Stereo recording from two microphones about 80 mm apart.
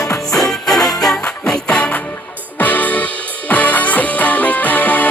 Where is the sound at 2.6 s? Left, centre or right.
Left.